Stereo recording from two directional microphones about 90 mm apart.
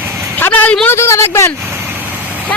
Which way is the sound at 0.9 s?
30° left (ahead or behind).